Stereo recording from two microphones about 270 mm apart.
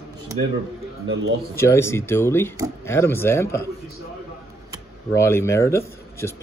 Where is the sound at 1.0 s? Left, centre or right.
Right.